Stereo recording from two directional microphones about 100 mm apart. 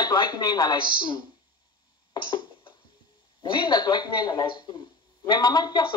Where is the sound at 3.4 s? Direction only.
50° left (ahead or behind).